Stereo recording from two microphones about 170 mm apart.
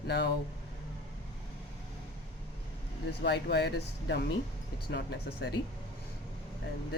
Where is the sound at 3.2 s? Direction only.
75° left (ahead or behind).